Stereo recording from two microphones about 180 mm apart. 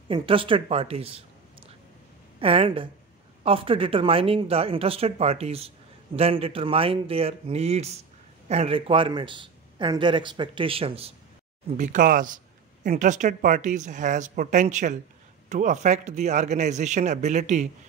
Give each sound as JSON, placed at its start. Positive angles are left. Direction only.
{"t": 0.1, "sound": "speech", "side_deg": -30}
{"t": 2.4, "sound": "speech", "side_deg": -30}
{"t": 11.7, "sound": "speech", "side_deg": -45}